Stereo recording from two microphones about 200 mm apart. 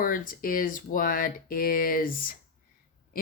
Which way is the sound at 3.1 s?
45° left (ahead or behind).